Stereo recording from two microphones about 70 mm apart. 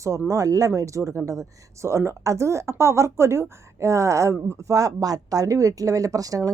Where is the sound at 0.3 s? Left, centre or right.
Right.